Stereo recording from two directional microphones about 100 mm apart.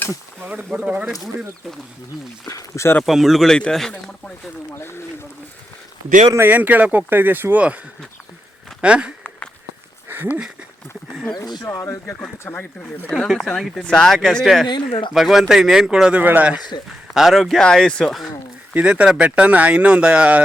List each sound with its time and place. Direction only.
0.7 s speech: 10° right (ahead or behind)
2.5 s speech: 30° left (ahead or behind)
3.0 s speech: centre (ahead or behind)
4.7 s speech: 25° left (ahead or behind)
6.3 s speech: 20° right (ahead or behind)
8.8 s speech: 10° right (ahead or behind)
10.1 s a sound: 20° right (ahead or behind)
11.1 s speech: 5° right (ahead or behind)
11.6 s speech: 25° left (ahead or behind)
13.1 s speech: centre (ahead or behind)
17.2 s speech: centre (ahead or behind)
18.7 s speech: 10° right (ahead or behind)